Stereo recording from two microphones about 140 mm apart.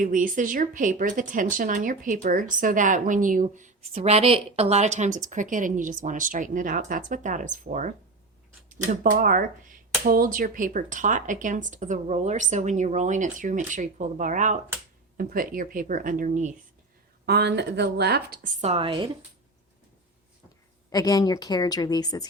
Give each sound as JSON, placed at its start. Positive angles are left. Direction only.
{"t": 0.0, "sound": "a woman's voice", "side_deg": -70}
{"t": 3.9, "sound": "a woman's voice", "side_deg": -45}
{"t": 8.9, "sound": "speech", "side_deg": -80}
{"t": 10.0, "sound": "speech", "side_deg": -90}
{"t": 15.2, "sound": "a woman's voice", "side_deg": -85}
{"t": 18.6, "sound": "speech", "side_deg": -45}
{"t": 20.9, "sound": "a woman's voice", "side_deg": 25}